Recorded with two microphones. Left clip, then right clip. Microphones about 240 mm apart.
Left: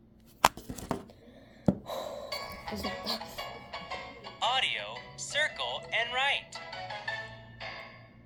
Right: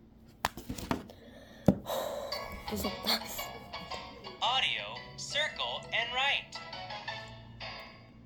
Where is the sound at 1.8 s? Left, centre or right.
Centre.